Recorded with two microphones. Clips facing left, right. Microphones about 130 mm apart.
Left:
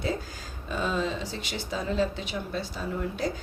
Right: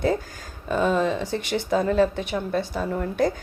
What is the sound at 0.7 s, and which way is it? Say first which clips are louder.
A woman's voice: right 7 dB; 55° right (ahead or behind).